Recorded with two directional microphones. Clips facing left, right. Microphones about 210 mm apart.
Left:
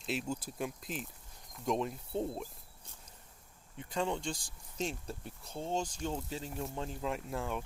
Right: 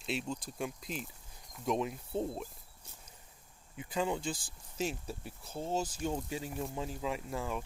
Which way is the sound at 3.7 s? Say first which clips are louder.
Right 1 dB; 5° right (ahead or behind).